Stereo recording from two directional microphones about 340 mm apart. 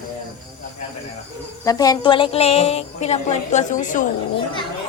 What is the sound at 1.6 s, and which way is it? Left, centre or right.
A woman's voice, centre.